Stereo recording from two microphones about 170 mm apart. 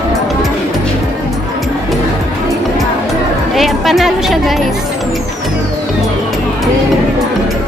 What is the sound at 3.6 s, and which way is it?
Speech, centre (ahead or behind).